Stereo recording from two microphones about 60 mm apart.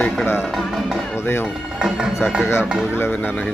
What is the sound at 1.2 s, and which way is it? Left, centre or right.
Speech, left.